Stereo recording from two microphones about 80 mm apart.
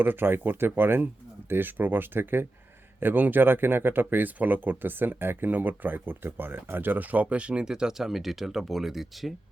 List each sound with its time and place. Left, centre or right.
0.0 s speech: right; by 9.3 s centre